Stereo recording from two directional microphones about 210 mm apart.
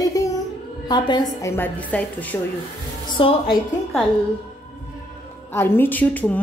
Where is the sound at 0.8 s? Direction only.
20° left (ahead or behind).